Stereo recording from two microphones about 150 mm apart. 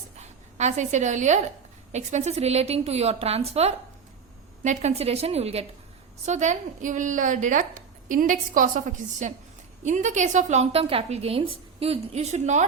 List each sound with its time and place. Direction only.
0.2 s a woman's voice: 50° right (ahead or behind)